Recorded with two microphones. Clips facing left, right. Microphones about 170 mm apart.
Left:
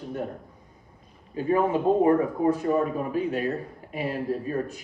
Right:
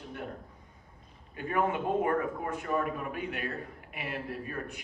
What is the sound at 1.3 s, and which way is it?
Speech, 30° left (ahead or behind).